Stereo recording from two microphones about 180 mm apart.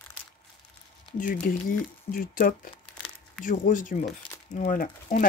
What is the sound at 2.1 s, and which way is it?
Speech, 50° left (ahead or behind).